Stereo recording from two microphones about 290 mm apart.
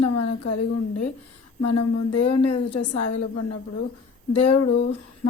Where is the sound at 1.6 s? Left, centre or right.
Left.